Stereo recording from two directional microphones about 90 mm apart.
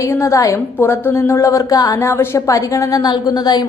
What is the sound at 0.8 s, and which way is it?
A woman's voice, 25° left (ahead or behind).